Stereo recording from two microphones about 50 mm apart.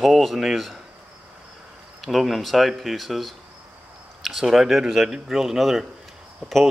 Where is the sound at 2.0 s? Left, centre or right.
Centre.